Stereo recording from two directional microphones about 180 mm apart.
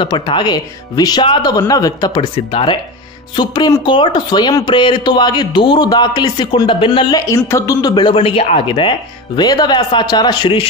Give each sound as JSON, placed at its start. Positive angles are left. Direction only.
{"t": 0.0, "sound": "speech", "side_deg": 25}